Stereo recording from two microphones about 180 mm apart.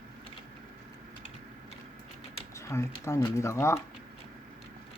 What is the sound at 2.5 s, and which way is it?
Speech, 15° left (ahead or behind).